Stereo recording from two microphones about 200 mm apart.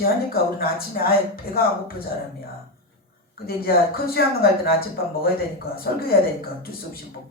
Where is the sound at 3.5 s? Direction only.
50° left (ahead or behind).